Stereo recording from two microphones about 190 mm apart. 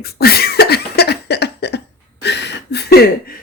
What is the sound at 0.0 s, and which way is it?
Cough, 55° left (ahead or behind).